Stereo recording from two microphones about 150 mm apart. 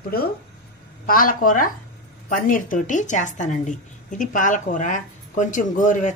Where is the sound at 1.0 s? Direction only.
70° left (ahead or behind).